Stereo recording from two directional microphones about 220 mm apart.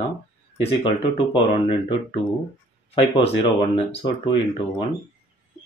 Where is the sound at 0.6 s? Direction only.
25° left (ahead or behind).